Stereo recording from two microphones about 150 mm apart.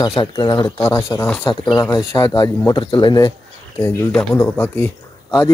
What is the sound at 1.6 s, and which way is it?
Speech, 25° left (ahead or behind).